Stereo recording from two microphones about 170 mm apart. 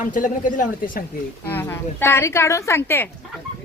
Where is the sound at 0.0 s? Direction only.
50° left (ahead or behind).